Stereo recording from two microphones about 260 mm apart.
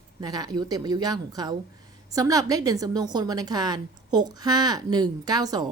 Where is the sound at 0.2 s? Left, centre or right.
Centre.